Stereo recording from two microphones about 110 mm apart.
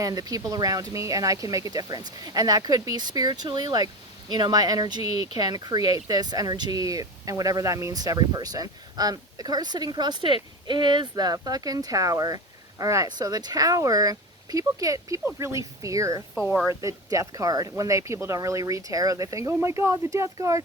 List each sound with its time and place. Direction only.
0.0 s speech: 35° right (ahead or behind)